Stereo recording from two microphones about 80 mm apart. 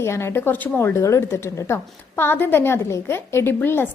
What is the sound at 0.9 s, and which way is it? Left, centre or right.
A woman's voice, left.